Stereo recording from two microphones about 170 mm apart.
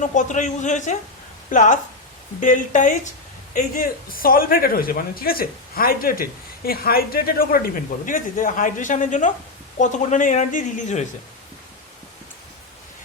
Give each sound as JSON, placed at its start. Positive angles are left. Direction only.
{"t": 0.0, "sound": "a woman's voice", "side_deg": 50}